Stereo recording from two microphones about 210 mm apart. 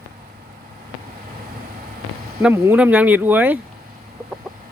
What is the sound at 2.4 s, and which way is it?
Speech, 10° right (ahead or behind).